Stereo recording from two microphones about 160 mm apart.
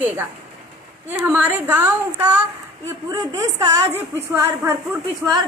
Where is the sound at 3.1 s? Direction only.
20° right (ahead or behind).